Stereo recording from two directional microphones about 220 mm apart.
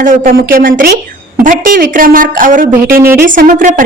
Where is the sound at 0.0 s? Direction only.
40° right (ahead or behind).